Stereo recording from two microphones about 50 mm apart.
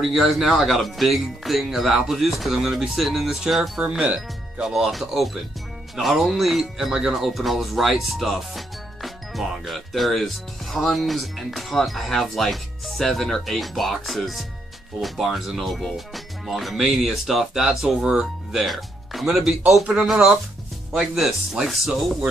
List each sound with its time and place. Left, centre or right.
0.0 s speech: centre
4.0 s speech: centre
4.6 s speech: centre
18.6 s speech: centre
19.2 s speech: centre